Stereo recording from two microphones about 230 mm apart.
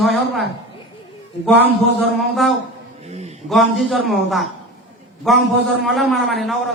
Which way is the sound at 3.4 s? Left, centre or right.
Centre.